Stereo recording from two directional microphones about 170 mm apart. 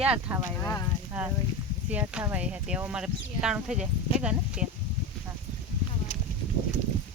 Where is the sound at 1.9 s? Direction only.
10° right (ahead or behind).